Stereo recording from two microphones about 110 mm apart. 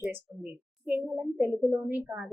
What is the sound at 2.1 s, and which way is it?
Speech, centre (ahead or behind).